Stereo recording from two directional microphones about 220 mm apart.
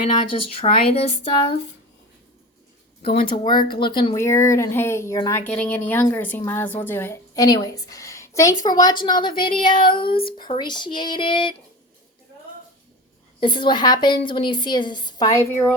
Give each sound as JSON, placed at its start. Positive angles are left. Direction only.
{"t": 0.5, "sound": "speech", "side_deg": 25}
{"t": 3.2, "sound": "speech", "side_deg": 20}
{"t": 13.4, "sound": "speech", "side_deg": 20}